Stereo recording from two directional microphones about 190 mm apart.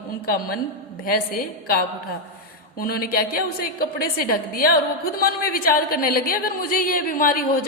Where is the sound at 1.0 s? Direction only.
50° left (ahead or behind).